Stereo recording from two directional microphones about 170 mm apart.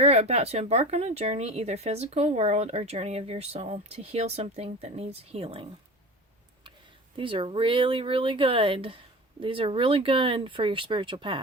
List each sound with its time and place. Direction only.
0.0 s speech: 40° right (ahead or behind)
7.2 s speech: 30° right (ahead or behind)